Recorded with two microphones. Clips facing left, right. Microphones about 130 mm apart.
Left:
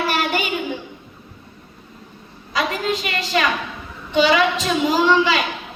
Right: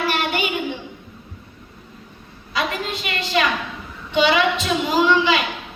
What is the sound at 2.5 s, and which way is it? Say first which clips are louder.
A woman's voice: left 3 dB; 40° left (ahead or behind).